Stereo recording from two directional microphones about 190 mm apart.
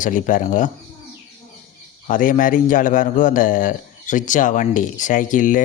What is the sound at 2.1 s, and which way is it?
A man's voice, 45° left (ahead or behind).